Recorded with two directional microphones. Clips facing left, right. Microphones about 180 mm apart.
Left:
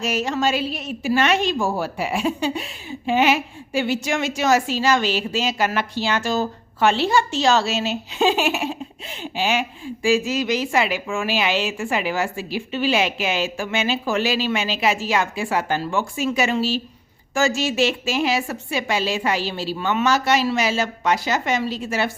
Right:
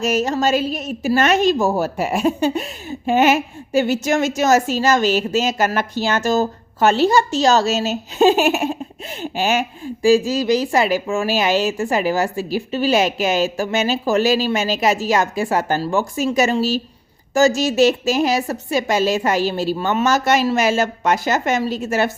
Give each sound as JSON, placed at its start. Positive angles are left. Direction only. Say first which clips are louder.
{"t": 0.0, "sound": "a woman's voice", "louder": "right 4 dB", "side_deg": -40}